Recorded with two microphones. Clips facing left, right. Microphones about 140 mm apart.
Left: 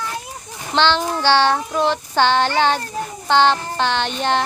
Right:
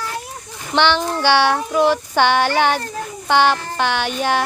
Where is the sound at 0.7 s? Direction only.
10° right (ahead or behind).